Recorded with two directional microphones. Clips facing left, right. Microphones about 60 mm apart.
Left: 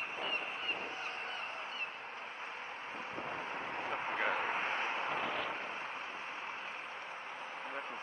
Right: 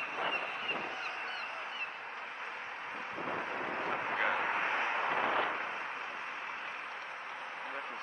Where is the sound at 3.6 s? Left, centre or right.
Right.